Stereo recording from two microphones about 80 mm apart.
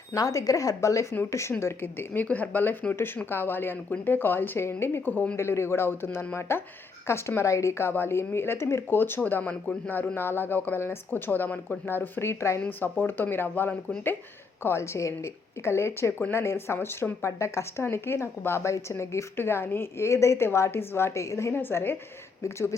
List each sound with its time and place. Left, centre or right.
0.1 s speech: left
5.4 s speech: left
12.6 s speech: left